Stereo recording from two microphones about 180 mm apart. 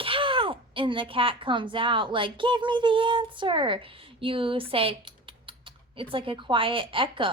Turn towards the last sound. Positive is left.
turn(degrees=-30)  # may be behind; listen again after turning